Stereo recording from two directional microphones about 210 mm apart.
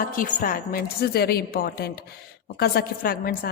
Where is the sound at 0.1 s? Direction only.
40° left (ahead or behind).